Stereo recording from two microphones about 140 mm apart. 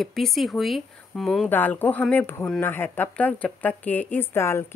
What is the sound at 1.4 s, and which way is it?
Speech, 15° left (ahead or behind).